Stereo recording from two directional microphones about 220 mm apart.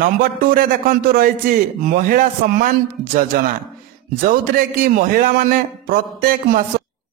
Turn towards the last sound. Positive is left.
turn(degrees=-40)  # may be behind; listen again after turning